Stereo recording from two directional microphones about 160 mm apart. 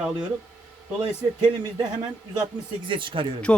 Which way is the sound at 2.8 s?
30° right (ahead or behind).